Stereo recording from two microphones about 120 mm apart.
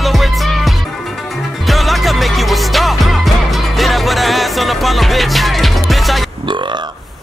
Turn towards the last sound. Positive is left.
turn(degrees=-40)  # may be behind; listen again after turning